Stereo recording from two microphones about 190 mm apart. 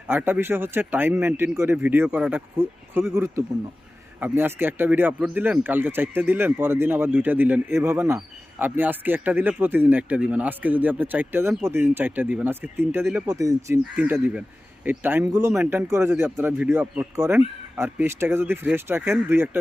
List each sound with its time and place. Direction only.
0.1 s speech: 10° right (ahead or behind)